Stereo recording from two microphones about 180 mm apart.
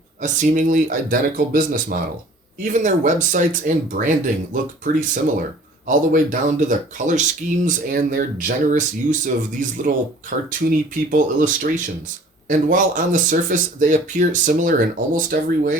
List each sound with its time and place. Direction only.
0.2 s speech: 45° right (ahead or behind)
5.9 s speech: 45° right (ahead or behind)